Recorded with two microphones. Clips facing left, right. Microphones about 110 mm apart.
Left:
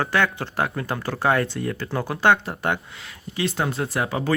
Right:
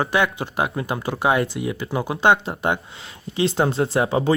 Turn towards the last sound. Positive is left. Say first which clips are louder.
# right 4 dB
turn(degrees=-25)  # may be behind; listen again after turning